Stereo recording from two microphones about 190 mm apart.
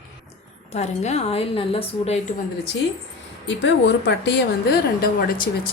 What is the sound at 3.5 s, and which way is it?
Speech, 70° left (ahead or behind).